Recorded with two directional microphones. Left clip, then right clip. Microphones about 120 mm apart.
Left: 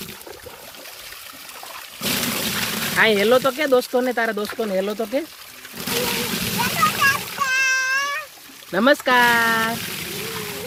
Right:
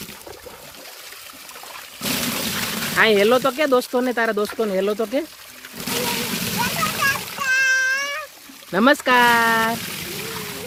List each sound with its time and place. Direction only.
2.0 s a sound: 40° left (ahead or behind)
2.9 s speech: 45° right (ahead or behind); by 5.2 s 60° right (ahead or behind)
5.7 s splash: 30° left (ahead or behind)
7.4 s a sound: 50° left (ahead or behind)
8.7 s speech: 55° right (ahead or behind)
9.7 s pour: 25° left (ahead or behind)